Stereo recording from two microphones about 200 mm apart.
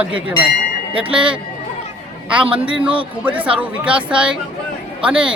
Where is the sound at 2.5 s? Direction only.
25° right (ahead or behind).